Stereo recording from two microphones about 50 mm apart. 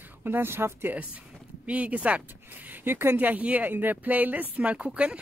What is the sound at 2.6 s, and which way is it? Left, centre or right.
Speech, right.